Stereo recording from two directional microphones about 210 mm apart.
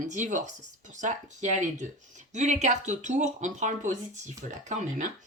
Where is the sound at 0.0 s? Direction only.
35° right (ahead or behind).